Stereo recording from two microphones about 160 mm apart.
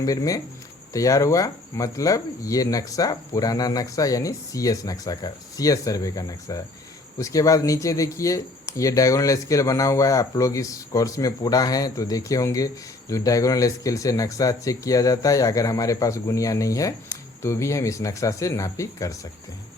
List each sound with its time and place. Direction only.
0.0 s speech: 20° left (ahead or behind)